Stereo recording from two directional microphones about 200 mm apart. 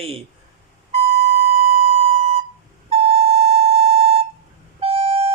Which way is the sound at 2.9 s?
30° right (ahead or behind).